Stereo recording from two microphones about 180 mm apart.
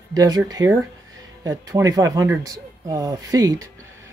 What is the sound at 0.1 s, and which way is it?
Speech, 20° right (ahead or behind).